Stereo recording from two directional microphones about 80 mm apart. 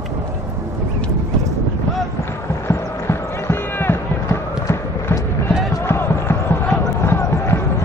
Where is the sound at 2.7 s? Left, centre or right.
Left.